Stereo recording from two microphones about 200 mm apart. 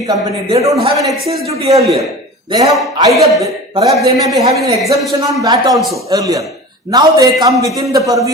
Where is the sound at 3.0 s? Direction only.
15° right (ahead or behind).